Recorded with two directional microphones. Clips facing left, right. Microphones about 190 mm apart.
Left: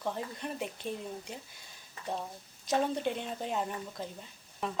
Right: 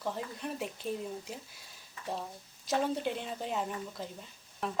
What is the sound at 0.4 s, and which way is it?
Speech, centre (ahead or behind).